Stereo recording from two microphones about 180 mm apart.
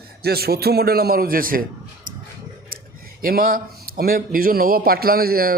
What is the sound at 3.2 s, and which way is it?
A man's voice, 50° right (ahead or behind).